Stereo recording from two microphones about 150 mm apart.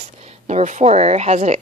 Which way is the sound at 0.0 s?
50° right (ahead or behind).